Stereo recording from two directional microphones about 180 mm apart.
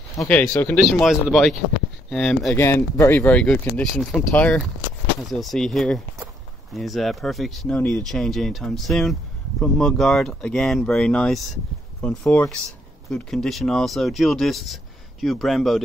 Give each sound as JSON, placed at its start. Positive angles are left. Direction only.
{"t": 0.5, "sound": "speech", "side_deg": 10}
{"t": 2.5, "sound": "speech", "side_deg": 15}